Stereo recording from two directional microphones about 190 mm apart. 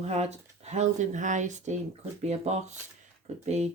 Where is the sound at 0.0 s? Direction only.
35° right (ahead or behind).